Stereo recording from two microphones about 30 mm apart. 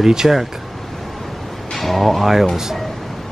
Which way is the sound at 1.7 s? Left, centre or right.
Centre.